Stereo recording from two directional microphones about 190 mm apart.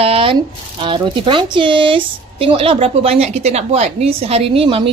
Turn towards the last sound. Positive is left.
turn(degrees=-30)  # may be behind; listen again after turning